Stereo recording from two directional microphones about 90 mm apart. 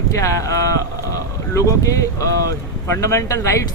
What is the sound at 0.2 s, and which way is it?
Speech, 35° left (ahead or behind).